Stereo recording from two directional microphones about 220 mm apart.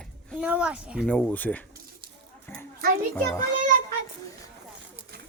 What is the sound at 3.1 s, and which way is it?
Speech, 15° left (ahead or behind).